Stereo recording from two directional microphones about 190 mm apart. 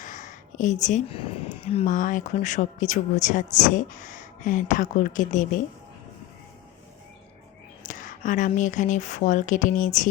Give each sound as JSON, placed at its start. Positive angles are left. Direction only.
{"t": 0.0, "sound": "speech", "side_deg": 40}
{"t": 7.9, "sound": "speech", "side_deg": 45}